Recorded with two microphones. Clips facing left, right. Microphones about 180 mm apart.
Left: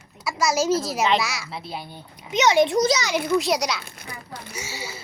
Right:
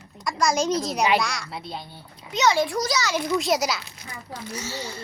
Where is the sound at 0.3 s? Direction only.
5° left (ahead or behind).